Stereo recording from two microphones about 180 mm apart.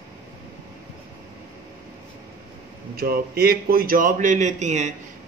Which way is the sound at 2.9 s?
55° right (ahead or behind).